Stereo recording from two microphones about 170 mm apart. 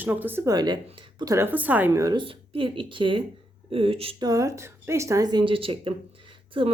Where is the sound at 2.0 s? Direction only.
30° right (ahead or behind).